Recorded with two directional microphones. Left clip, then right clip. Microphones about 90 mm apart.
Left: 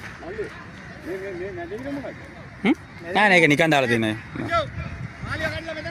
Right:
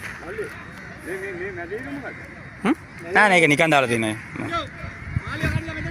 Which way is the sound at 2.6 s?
60° left (ahead or behind).